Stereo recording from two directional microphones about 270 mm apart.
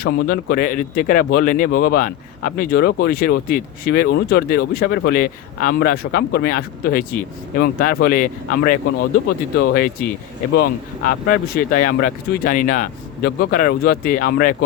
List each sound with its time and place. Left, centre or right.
0.0 s speech: left